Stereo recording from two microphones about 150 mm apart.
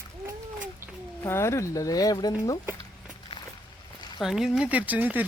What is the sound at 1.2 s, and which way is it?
Speech, 20° left (ahead or behind).